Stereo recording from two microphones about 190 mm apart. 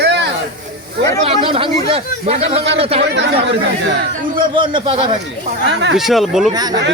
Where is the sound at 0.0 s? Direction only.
65° right (ahead or behind).